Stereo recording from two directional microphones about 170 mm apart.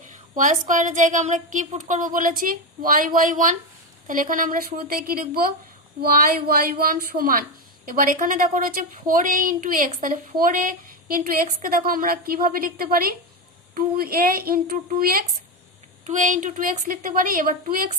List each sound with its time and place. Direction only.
0.0 s a woman's voice: 45° right (ahead or behind)
16.0 s a woman's voice: 45° right (ahead or behind)